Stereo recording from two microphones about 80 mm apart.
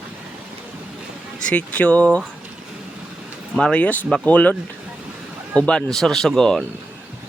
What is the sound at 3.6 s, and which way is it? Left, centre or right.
Speech, centre.